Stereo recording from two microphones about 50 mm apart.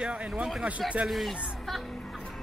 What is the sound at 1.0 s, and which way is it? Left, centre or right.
Speech, centre.